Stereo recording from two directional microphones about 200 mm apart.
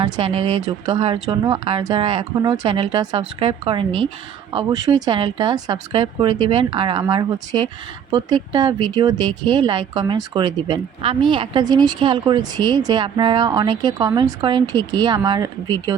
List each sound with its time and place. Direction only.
0.0 s speech: 30° right (ahead or behind)